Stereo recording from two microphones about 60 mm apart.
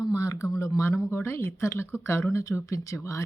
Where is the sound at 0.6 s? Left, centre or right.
Left.